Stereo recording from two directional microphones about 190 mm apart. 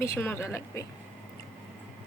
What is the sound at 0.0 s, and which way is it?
Speech, 10° left (ahead or behind).